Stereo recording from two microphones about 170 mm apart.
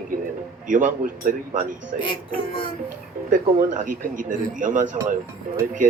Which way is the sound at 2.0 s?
30° left (ahead or behind).